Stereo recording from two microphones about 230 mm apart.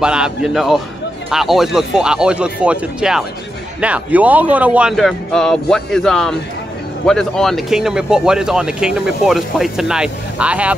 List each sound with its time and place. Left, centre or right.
0.0 s speech: centre